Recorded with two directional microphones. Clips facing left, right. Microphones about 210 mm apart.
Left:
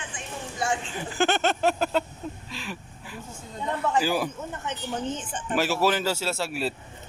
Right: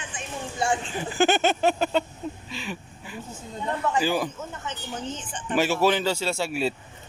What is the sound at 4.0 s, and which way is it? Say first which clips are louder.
Speech: even; 5° left (ahead or behind).